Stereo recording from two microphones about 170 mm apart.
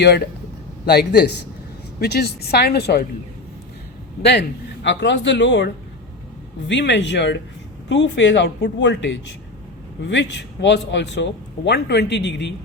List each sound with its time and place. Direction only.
0.9 s speech: 70° left (ahead or behind)
4.2 s a man's voice: 85° left